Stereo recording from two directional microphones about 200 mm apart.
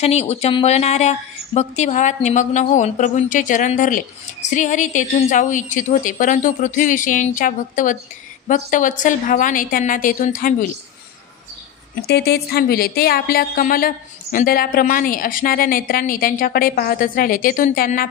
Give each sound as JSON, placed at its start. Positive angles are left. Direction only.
{"t": 0.0, "sound": "a woman's voice", "side_deg": 30}
{"t": 12.1, "sound": "a woman's voice", "side_deg": 50}